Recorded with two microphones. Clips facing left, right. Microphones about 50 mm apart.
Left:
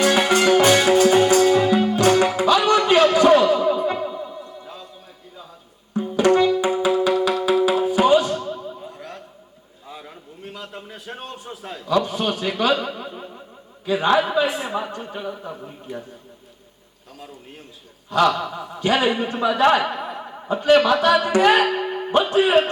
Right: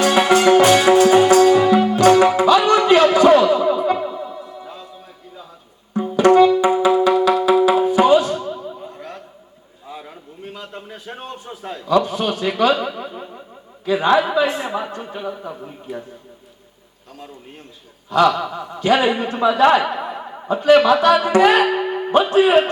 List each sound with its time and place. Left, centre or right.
0.0 s music: centre
5.9 s music: centre
7.7 s tabla: centre
8.3 s boing: centre
9.8 s a sound: centre
12.0 s a man's voice: centre
13.1 s a sound: centre
14.4 s a man's voice: centre
18.1 s a man's voice: centre
21.1 s music: centre